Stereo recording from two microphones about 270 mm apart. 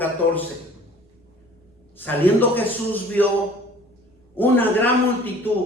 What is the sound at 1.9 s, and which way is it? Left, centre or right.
A man's voice, centre.